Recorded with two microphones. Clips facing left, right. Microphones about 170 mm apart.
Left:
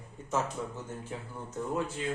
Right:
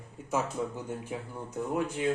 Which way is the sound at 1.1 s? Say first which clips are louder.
Right 3 dB; 15° right (ahead or behind).